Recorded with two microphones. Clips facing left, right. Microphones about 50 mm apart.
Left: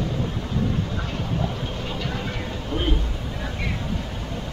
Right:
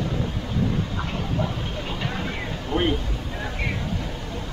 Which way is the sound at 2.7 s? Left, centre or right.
Right.